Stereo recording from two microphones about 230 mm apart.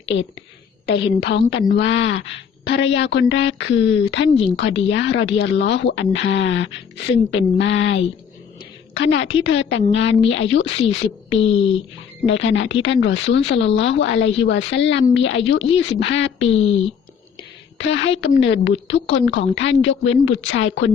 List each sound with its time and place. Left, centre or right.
1.2 s a woman's voice: left
17.7 s a woman's voice: left